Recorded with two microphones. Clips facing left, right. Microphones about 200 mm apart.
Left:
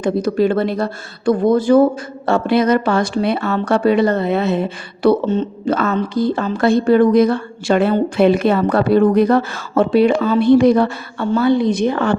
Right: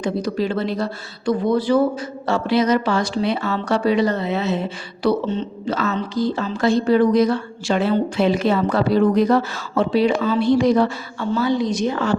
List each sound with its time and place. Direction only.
0.0 s speech: 55° left (ahead or behind)